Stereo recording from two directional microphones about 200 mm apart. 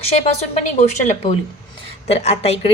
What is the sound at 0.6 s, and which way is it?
A woman's voice, 35° left (ahead or behind).